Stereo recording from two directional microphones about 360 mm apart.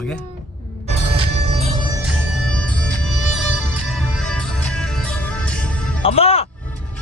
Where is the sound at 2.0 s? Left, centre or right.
Centre.